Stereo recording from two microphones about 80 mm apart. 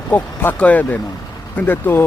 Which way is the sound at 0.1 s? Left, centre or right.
Left.